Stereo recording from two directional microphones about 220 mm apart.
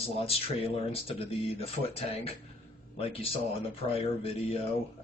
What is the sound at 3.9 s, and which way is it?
Speech, 25° left (ahead or behind).